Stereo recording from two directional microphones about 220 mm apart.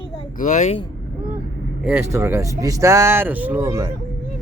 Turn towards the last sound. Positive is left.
turn(degrees=-15)  # may be behind; listen again after turning